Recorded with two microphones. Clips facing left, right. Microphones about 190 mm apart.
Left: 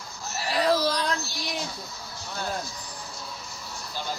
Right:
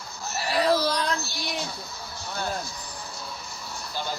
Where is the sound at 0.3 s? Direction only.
60° right (ahead or behind).